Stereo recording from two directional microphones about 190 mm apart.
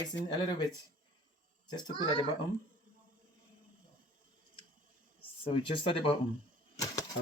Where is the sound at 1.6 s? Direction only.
20° left (ahead or behind).